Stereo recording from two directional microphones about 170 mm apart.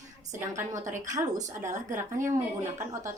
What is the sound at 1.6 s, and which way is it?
A woman's voice, 45° right (ahead or behind).